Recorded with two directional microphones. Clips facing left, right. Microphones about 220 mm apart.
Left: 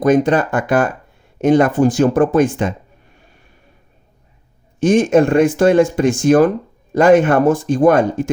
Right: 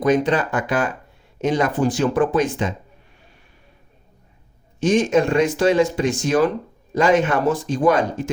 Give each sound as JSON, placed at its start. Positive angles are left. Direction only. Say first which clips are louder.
{"t": 0.0, "sound": "speech", "louder": "left 5 dB", "side_deg": 45}
{"t": 4.8, "sound": "speech", "louder": "left 5 dB", "side_deg": 50}